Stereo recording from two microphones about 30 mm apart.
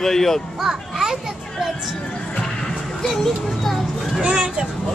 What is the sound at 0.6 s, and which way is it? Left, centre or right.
Children playing, centre.